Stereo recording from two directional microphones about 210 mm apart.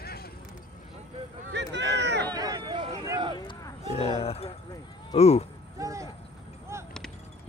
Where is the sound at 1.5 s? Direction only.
55° right (ahead or behind).